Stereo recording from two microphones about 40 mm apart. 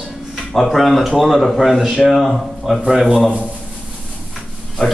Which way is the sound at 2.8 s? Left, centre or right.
Right.